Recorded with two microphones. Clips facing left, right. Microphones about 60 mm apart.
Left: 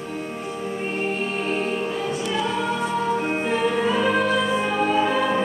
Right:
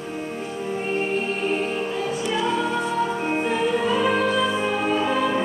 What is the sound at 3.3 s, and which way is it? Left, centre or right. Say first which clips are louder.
Music: even; centre.